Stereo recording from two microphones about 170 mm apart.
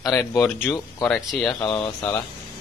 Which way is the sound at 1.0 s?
Centre (ahead or behind).